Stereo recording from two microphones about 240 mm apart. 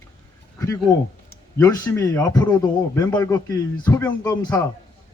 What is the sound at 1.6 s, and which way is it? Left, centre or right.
A man's voice, centre.